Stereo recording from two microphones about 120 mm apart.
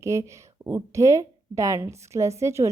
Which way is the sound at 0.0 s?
25° right (ahead or behind).